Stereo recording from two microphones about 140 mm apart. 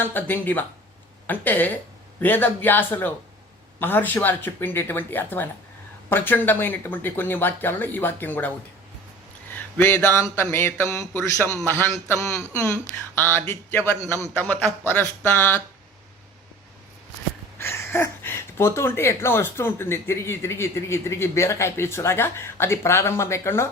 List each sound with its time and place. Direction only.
0.0 s a man's voice: 15° left (ahead or behind)
17.6 s speech: 15° left (ahead or behind)